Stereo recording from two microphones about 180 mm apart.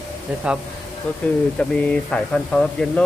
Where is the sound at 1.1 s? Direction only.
5° left (ahead or behind).